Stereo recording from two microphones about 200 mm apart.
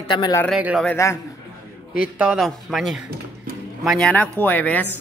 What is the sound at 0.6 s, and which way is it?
Speech, 5° right (ahead or behind).